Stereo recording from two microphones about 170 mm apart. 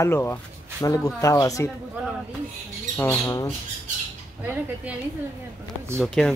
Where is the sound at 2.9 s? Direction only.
10° left (ahead or behind).